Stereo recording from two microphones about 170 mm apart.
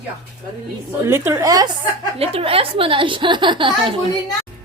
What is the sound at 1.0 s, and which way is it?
Speech, 15° right (ahead or behind).